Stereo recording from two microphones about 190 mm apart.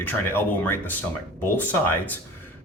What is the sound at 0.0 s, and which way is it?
Speech, 10° left (ahead or behind).